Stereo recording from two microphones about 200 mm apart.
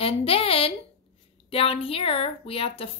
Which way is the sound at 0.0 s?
30° left (ahead or behind).